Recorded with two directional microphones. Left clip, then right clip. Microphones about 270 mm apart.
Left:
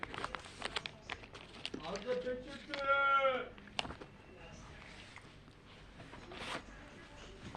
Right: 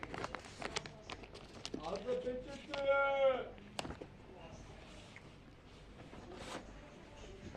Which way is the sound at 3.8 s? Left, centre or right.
Centre.